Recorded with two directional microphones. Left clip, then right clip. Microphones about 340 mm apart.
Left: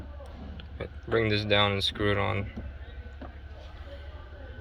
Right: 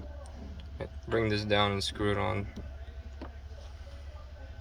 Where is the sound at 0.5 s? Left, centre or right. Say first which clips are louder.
Left 2 dB; centre.